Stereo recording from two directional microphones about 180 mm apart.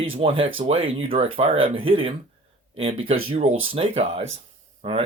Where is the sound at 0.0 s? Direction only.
30° right (ahead or behind).